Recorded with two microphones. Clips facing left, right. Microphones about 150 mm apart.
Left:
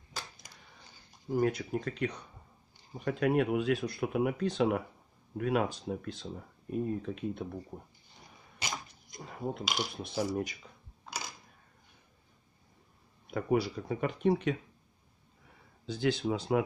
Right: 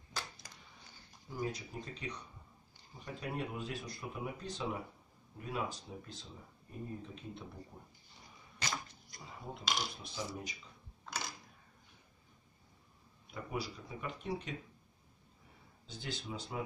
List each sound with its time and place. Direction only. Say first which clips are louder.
1.3 s speech: left 11 dB; 60° left (ahead or behind)
7.7 s speech: left 9 dB; 55° left (ahead or behind)
8.5 s a sound: left 1 dB; 15° left (ahead or behind)
9.2 s speech: left 8 dB; 60° left (ahead or behind)
13.3 s speech: left 12 dB; 75° left (ahead or behind)
15.9 s speech: left 14 dB; 90° left; by 16.6 s 70° left (ahead or behind)